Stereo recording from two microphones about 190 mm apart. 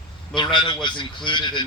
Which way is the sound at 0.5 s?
25° left (ahead or behind).